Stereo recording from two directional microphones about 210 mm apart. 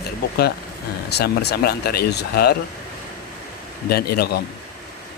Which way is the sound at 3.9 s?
50° left (ahead or behind).